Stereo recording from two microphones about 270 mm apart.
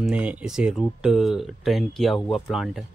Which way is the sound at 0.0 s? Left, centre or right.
Centre.